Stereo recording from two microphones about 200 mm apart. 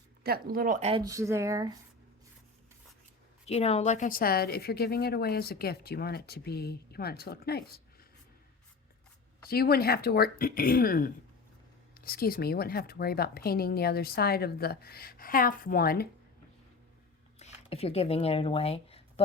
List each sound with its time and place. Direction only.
0.2 s speech: 50° right (ahead or behind)
0.9 s speech: 20° right (ahead or behind)
3.4 s speech: 30° left (ahead or behind); by 7.6 s 50° left (ahead or behind)
9.5 s speech: 50° left (ahead or behind)
17.4 s speech: 30° left (ahead or behind)